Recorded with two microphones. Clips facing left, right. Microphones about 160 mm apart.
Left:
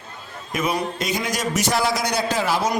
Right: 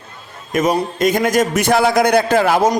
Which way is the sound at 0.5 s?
45° right (ahead or behind).